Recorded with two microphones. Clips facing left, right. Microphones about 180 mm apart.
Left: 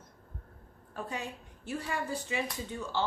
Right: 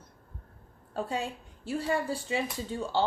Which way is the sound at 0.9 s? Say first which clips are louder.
Right 6 dB; 30° right (ahead or behind).